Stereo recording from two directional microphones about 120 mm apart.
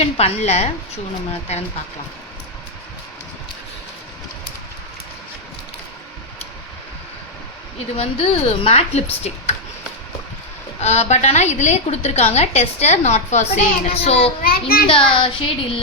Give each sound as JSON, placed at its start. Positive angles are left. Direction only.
{"t": 0.0, "sound": "a woman's voice", "side_deg": 60}
{"t": 7.9, "sound": "a woman's voice", "side_deg": 55}
{"t": 10.8, "sound": "a woman's voice", "side_deg": 65}